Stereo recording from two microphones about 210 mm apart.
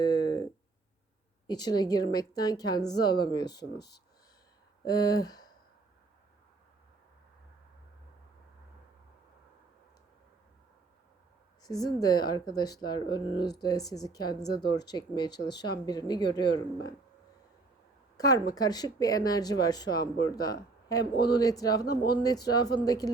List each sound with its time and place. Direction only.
0.0 s a sound: 20° left (ahead or behind)
1.5 s speech: 20° left (ahead or behind)
4.9 s speech: 20° left (ahead or behind)
11.6 s speech: 20° left (ahead or behind)
18.2 s speech: 15° left (ahead or behind)